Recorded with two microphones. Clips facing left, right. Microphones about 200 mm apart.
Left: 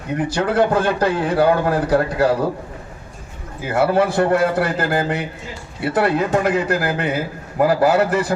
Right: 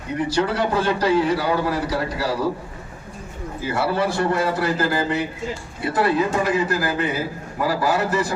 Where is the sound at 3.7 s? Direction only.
55° left (ahead or behind).